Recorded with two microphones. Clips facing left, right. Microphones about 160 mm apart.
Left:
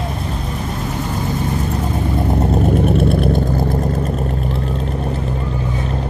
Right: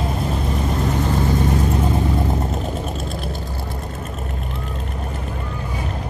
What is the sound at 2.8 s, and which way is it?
Vehicle, 65° left (ahead or behind).